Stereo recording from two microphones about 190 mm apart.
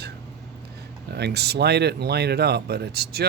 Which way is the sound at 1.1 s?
60° right (ahead or behind).